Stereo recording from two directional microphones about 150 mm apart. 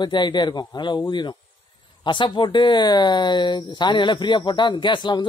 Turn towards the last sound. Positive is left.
turn(degrees=30)  # may be behind; listen again after turning